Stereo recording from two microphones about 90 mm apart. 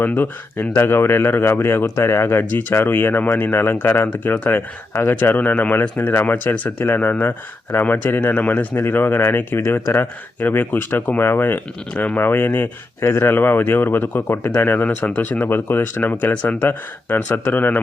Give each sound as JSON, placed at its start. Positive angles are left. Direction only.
{"t": 0.0, "sound": "speech", "side_deg": 20}